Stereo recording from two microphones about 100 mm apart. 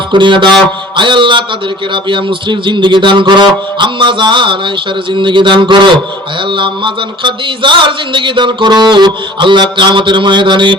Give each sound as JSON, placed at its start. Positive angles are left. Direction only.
{"t": 0.1, "sound": "speech", "side_deg": -50}